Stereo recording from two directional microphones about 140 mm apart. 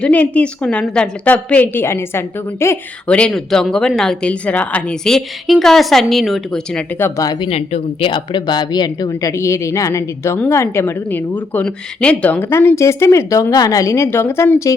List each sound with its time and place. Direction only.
0.0 s a woman's voice: 10° left (ahead or behind)
3.1 s speech: 5° left (ahead or behind)
7.0 s speech: 25° left (ahead or behind)